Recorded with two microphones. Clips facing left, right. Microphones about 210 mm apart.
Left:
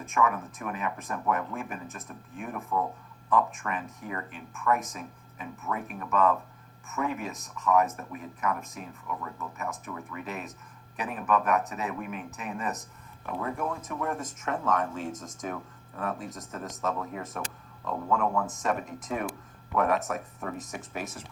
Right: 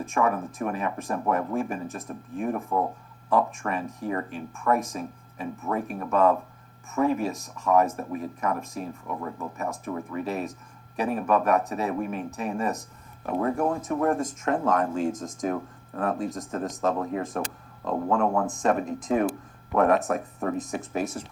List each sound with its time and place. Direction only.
0.0 s speech: 35° right (ahead or behind)
13.2 s speech: 45° right (ahead or behind)
14.2 s speech: 30° right (ahead or behind)
20.6 s speech: 30° right (ahead or behind)